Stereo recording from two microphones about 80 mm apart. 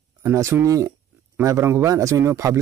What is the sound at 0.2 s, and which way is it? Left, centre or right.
A man's voice, right.